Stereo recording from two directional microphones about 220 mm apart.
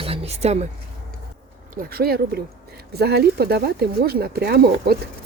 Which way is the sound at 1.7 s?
40° right (ahead or behind).